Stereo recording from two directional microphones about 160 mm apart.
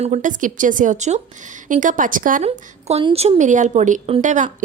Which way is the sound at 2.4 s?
40° right (ahead or behind).